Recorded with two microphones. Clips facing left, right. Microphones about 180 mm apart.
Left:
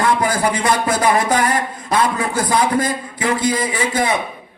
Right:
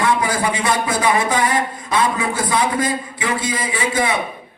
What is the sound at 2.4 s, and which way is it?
A man's voice, 40° left (ahead or behind).